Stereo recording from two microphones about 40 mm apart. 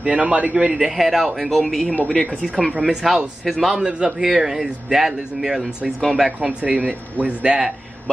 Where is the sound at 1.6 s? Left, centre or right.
Centre.